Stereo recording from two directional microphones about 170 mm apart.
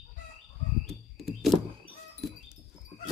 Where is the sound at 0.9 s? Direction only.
Centre (ahead or behind).